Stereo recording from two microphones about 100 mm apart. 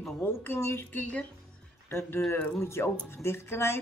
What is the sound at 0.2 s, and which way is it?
Speech, 20° left (ahead or behind).